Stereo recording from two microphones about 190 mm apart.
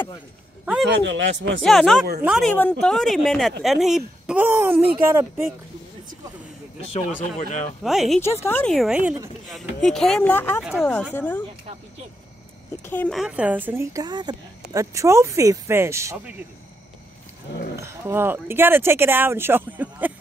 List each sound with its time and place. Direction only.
0.8 s speech: 70° right (ahead or behind)
1.6 s speech: centre (ahead or behind)
7.2 s speech: 40° left (ahead or behind)
7.8 s speech: centre (ahead or behind)
8.5 s speech: 10° left (ahead or behind)
8.7 s speech: 5° right (ahead or behind)
10.6 s speech: 5° right (ahead or behind)
11.1 s speech: 10° left (ahead or behind)
12.8 s speech: 10° left (ahead or behind)
13.2 s a woman's voice: 5° right (ahead or behind)
17.7 s a woman's voice: 15° right (ahead or behind)